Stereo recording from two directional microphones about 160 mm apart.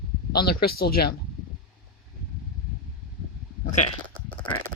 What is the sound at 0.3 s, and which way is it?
Speech, 70° left (ahead or behind).